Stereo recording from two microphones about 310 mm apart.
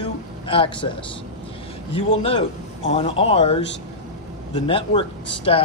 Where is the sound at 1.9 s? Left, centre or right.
Centre.